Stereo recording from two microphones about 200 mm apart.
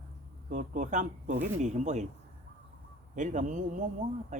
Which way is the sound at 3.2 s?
40° right (ahead or behind).